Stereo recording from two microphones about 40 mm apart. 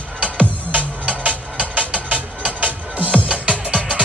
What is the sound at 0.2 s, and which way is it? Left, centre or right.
Music, right.